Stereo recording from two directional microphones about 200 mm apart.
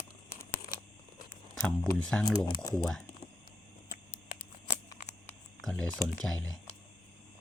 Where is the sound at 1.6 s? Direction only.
5° left (ahead or behind).